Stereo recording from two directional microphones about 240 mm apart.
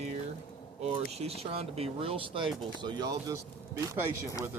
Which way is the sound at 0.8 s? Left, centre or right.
Right.